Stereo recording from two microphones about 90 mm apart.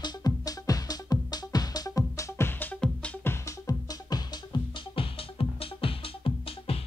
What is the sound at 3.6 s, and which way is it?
Music, 50° left (ahead or behind).